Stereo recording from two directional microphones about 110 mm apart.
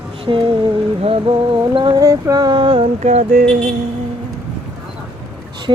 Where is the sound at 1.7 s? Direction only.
45° right (ahead or behind).